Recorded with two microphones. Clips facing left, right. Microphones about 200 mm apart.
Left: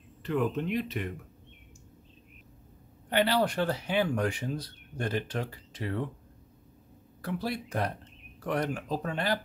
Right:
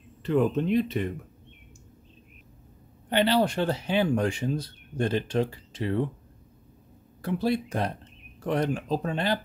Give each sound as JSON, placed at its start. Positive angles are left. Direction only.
{"t": 0.2, "sound": "speech", "side_deg": -25}
{"t": 3.1, "sound": "speech", "side_deg": -25}
{"t": 7.2, "sound": "speech", "side_deg": -25}